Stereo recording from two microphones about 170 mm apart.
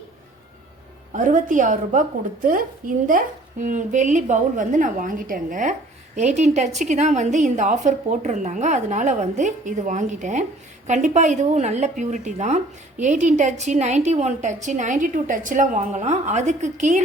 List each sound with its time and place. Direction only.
1.1 s speech: 50° right (ahead or behind)